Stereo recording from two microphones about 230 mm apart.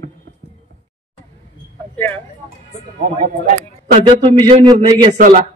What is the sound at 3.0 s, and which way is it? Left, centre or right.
A man's voice, right.